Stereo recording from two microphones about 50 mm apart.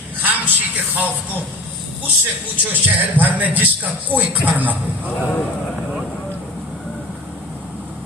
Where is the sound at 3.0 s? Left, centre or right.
Right.